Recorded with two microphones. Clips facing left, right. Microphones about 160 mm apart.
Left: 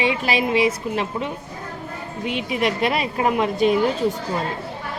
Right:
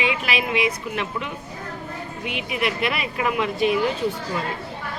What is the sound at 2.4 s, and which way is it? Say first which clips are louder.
A woman's voice: left 3 dB; 35° left (ahead or behind).